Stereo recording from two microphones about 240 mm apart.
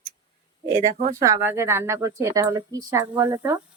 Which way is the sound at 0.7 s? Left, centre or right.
Right.